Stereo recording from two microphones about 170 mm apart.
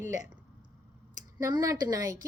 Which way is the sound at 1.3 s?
20° right (ahead or behind).